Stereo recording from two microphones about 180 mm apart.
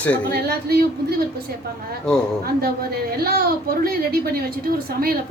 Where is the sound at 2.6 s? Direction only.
55° right (ahead or behind).